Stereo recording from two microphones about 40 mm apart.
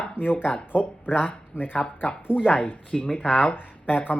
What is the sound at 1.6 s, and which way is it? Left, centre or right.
Speech, left.